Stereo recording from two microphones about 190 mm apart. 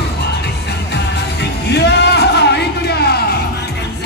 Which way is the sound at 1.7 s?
65° left (ahead or behind).